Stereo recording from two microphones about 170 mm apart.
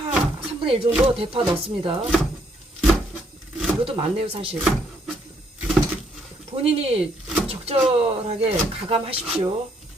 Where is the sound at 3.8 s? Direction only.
35° right (ahead or behind).